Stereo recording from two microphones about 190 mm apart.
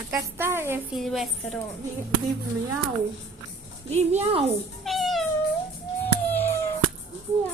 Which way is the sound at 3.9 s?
35° right (ahead or behind).